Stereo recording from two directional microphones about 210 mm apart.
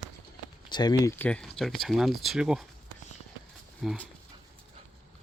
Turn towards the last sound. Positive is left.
turn(degrees=0)  # may be behind; listen again after turning